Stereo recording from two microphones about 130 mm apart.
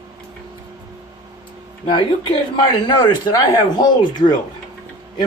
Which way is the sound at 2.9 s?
35° left (ahead or behind).